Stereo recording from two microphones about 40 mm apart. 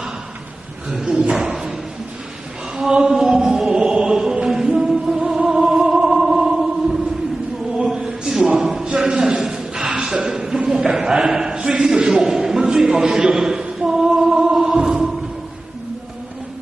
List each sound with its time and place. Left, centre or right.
0.9 s speech: centre
1.3 s thump: centre
2.8 s chant: centre
7.8 s a sound: centre